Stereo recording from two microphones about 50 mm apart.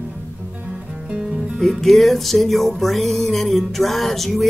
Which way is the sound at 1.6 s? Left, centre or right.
Centre.